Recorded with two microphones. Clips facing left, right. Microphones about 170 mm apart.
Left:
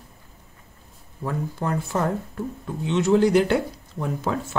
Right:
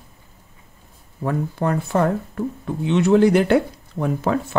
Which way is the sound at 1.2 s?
60° right (ahead or behind).